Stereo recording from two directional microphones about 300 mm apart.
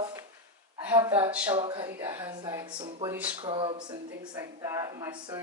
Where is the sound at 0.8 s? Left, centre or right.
Centre.